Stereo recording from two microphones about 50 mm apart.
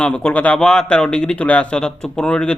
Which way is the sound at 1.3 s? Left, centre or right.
Left.